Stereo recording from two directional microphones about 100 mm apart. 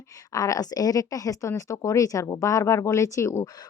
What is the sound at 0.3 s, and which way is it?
A woman's voice, 35° left (ahead or behind).